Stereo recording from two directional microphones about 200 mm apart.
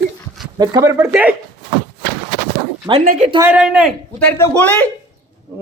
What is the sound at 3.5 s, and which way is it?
A man's voice, 5° right (ahead or behind).